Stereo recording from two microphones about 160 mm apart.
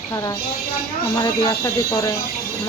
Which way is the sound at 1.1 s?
25° left (ahead or behind).